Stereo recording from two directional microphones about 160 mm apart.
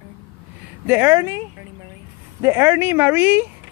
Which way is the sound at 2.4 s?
15° right (ahead or behind).